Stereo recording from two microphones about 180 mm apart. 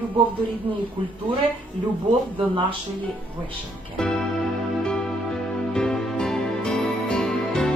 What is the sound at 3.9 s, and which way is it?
Music, 5° left (ahead or behind).